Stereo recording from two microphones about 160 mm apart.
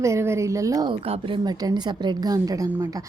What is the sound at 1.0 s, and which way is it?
Speech, 40° right (ahead or behind).